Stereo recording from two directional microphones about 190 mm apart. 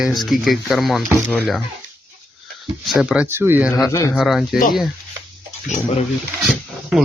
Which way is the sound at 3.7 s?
15° left (ahead or behind).